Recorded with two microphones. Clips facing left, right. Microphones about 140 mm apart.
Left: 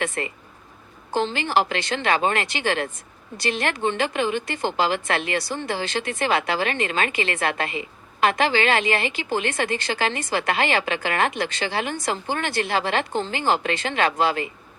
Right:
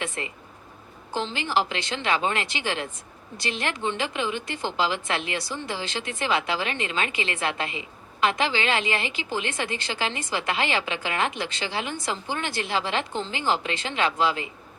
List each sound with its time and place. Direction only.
0.0 s speech: 70° left (ahead or behind)
1.1 s a woman's voice: 55° left (ahead or behind)